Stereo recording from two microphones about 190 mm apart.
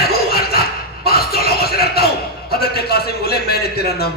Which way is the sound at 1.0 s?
55° left (ahead or behind).